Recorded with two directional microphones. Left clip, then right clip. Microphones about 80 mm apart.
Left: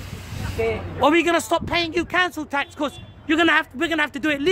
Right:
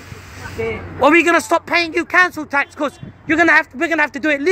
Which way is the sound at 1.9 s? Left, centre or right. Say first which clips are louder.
Right 7 dB; centre.